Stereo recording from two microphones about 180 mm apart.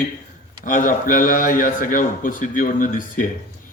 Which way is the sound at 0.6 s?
50° left (ahead or behind).